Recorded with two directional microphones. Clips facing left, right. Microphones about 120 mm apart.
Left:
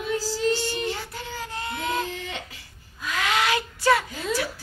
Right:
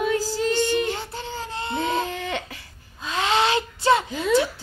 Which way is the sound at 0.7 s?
25° right (ahead or behind).